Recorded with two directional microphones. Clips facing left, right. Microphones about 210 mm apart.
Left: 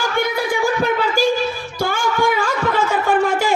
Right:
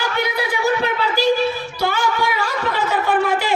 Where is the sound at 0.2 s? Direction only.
50° left (ahead or behind).